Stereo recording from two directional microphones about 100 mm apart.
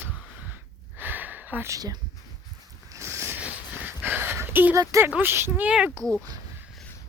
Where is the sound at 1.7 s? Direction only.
40° right (ahead or behind).